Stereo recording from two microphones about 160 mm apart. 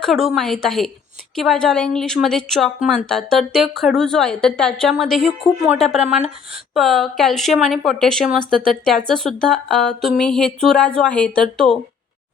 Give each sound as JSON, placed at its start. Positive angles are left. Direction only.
{"t": 0.0, "sound": "speech", "side_deg": 0}